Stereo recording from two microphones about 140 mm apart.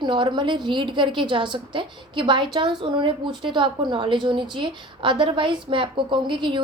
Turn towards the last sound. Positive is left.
turn(degrees=-35)  # may be behind; listen again after turning